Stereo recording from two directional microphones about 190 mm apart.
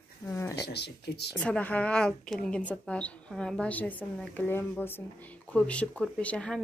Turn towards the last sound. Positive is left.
turn(degrees=5)  # may be behind; listen again after turning